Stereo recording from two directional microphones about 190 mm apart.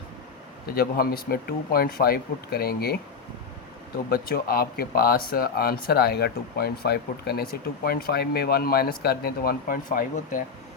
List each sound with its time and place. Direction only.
0.8 s speech: 50° left (ahead or behind)
4.1 s speech: 55° left (ahead or behind)